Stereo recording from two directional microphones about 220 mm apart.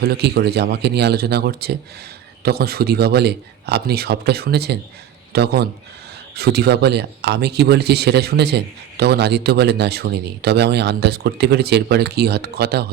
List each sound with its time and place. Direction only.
0.0 s speech: 50° right (ahead or behind)